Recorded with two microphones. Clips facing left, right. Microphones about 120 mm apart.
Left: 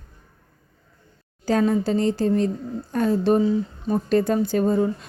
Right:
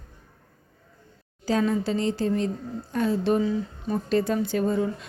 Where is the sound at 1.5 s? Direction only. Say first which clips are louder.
Left 4 dB; 45° left (ahead or behind).